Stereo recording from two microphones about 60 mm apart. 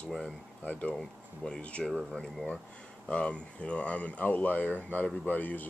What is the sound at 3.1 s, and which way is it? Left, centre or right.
Speech, centre.